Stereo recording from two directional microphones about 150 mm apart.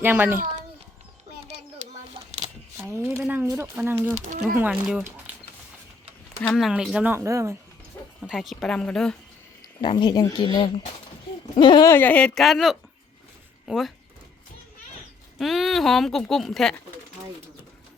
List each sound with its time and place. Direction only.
0.0 s speech: 15° right (ahead or behind)
0.3 s a child's voice: 55° right (ahead or behind)
1.8 s a sound: 50° right (ahead or behind)
2.2 s a sound: 35° right (ahead or behind)
2.7 s a sound: 20° right (ahead or behind)
3.2 s speech: 10° right (ahead or behind)
3.4 s speech: 20° right (ahead or behind); by 5.0 s 5° right (ahead or behind)
6.5 s speech: centre (ahead or behind); by 7.5 s 20° right (ahead or behind)
8.2 s speech: centre (ahead or behind)
9.8 s speech: 30° left (ahead or behind)
11.9 s speech: 10° left (ahead or behind)
15.4 s speech: centre (ahead or behind)